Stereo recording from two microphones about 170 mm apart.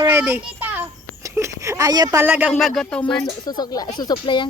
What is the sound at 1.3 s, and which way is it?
A woman's voice, 15° right (ahead or behind).